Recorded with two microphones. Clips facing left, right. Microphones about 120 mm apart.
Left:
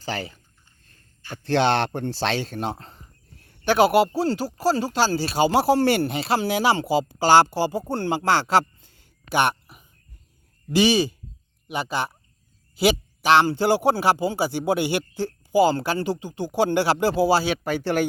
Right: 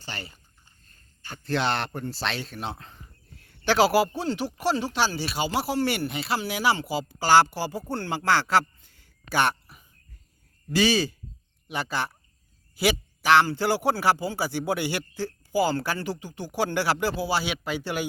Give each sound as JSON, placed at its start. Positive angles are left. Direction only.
{"t": 1.5, "sound": "a man's voice", "side_deg": 70}
{"t": 2.5, "sound": "speech", "side_deg": 45}
{"t": 3.5, "sound": "a man's voice", "side_deg": 20}